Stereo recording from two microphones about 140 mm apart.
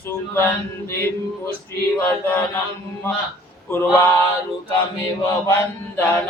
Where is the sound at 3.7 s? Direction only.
15° left (ahead or behind).